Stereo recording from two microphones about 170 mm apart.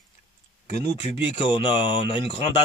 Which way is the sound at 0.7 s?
45° left (ahead or behind).